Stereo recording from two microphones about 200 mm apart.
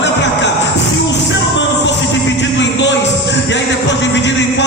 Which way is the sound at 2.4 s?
65° left (ahead or behind).